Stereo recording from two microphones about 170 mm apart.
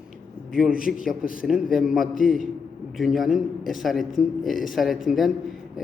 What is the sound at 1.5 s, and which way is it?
A man's voice, centre (ahead or behind).